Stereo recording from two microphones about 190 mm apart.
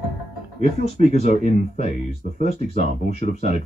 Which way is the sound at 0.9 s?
45° right (ahead or behind).